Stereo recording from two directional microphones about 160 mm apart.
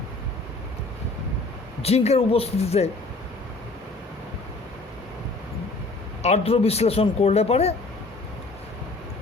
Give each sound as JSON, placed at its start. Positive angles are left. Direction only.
{"t": 1.8, "sound": "a man's voice", "side_deg": 40}
{"t": 6.2, "sound": "a man's voice", "side_deg": 40}